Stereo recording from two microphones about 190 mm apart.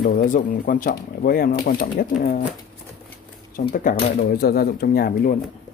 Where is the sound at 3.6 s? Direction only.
50° left (ahead or behind).